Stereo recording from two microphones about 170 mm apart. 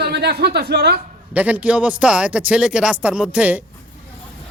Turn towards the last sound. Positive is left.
turn(degrees=-10)  # may be behind; listen again after turning